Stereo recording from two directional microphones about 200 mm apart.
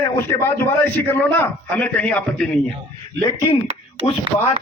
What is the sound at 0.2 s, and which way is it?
A man's voice, 10° left (ahead or behind).